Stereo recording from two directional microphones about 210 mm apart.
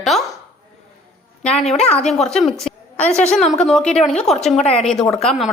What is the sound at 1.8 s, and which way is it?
Speech, 5° left (ahead or behind).